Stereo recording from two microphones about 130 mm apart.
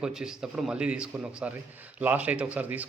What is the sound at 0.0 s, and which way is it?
Speech, 5° right (ahead or behind).